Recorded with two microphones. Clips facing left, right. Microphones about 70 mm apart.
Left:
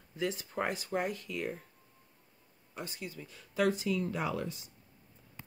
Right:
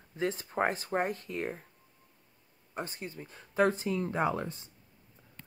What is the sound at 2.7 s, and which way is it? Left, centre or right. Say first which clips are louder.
Speech: right 3 dB; right.